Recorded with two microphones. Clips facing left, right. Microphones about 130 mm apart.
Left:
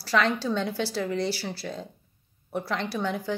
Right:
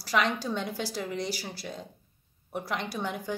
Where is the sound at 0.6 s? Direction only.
65° left (ahead or behind).